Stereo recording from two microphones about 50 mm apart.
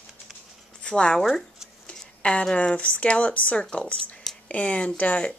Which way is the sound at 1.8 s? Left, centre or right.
Left.